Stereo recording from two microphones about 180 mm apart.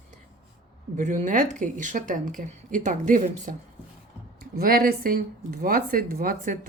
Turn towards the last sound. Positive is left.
turn(degrees=-50)  # may be behind; listen again after turning